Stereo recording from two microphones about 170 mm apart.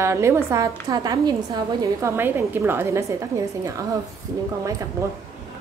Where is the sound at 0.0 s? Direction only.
15° right (ahead or behind).